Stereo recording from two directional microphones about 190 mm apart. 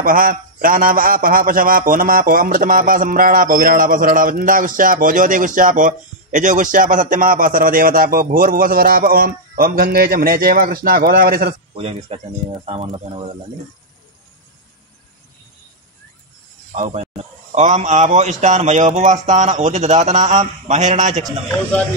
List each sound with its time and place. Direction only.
0.0 s a man's voice: 50° right (ahead or behind)
11.7 s speech: 30° right (ahead or behind)
16.7 s speech: 35° right (ahead or behind)